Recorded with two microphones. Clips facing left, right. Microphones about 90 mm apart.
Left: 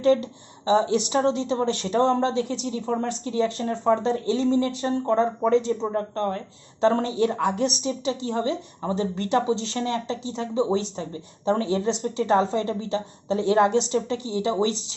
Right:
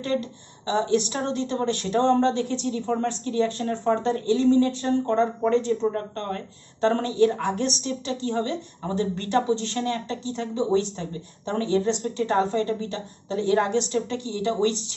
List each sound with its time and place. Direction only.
0.7 s a woman's voice: 15° left (ahead or behind)